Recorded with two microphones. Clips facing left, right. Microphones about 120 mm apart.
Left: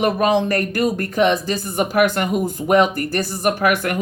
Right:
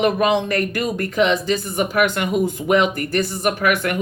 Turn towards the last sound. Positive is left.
turn(degrees=40)  # may be behind; listen again after turning